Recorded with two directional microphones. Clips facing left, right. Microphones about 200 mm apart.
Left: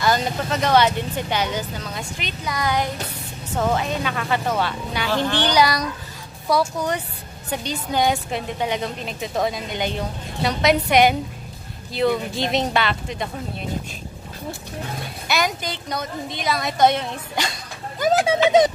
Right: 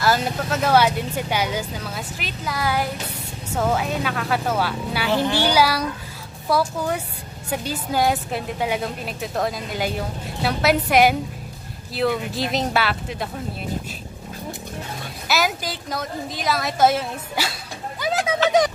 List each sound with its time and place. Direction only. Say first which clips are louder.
0.0 s a woman's voice: even; 5° right (ahead or behind)
15.2 s a woman's voice: right 1 dB; 5° right (ahead or behind)
18.0 s speech: left 6 dB; 50° left (ahead or behind)